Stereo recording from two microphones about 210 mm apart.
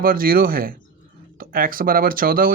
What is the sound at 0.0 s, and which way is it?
Speech, 45° right (ahead or behind).